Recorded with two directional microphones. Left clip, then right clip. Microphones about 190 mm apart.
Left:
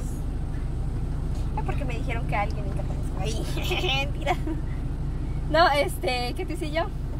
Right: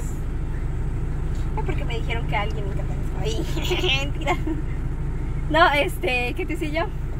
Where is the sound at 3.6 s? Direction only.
Centre (ahead or behind).